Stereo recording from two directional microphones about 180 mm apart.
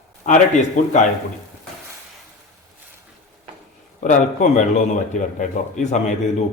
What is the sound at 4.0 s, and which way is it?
A man's voice, 45° left (ahead or behind).